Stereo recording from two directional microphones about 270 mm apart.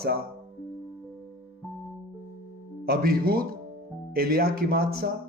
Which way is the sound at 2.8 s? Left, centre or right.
Right.